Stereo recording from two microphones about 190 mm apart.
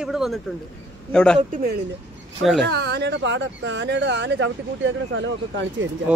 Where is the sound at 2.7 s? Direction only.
60° right (ahead or behind).